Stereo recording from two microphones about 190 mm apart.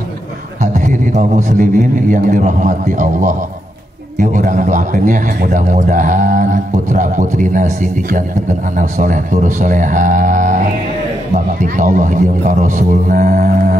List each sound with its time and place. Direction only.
0.6 s a man's voice: 40° right (ahead or behind)